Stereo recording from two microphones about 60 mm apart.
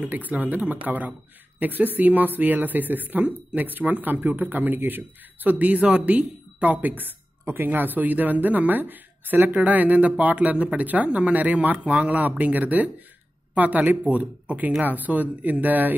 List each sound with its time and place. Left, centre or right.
0.0 s speech: right